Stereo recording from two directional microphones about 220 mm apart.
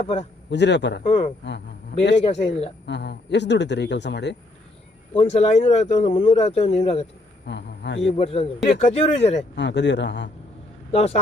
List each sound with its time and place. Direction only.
0.0 s speech: 30° left (ahead or behind)
0.5 s speech: 50° left (ahead or behind)
1.0 s speech: 25° left (ahead or behind)
2.8 s speech: 50° left (ahead or behind)
5.1 s speech: 30° left (ahead or behind)
7.4 s a man's voice: 50° left (ahead or behind)
8.1 s speech: 25° left (ahead or behind)
9.6 s speech: 55° left (ahead or behind)
10.9 s speech: 30° left (ahead or behind)